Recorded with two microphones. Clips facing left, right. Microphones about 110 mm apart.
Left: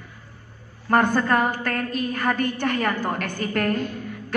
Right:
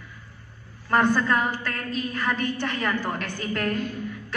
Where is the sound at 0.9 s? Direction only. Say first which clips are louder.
Left 2 dB; 50° left (ahead or behind).